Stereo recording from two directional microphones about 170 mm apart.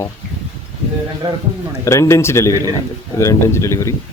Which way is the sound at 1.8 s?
15° left (ahead or behind).